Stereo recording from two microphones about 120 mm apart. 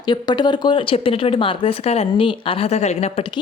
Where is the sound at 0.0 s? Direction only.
35° left (ahead or behind); by 3.2 s 65° left (ahead or behind).